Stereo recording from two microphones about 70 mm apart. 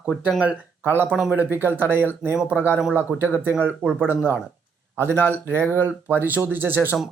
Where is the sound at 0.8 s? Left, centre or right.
Right.